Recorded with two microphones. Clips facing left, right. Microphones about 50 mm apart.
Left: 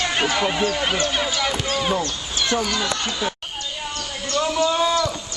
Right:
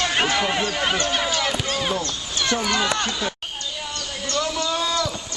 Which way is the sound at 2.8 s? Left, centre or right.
Right.